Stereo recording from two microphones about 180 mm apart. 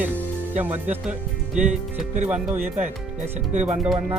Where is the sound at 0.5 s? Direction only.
10° right (ahead or behind).